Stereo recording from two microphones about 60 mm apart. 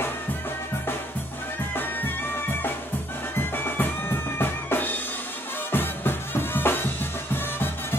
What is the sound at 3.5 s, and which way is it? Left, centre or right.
Music, left.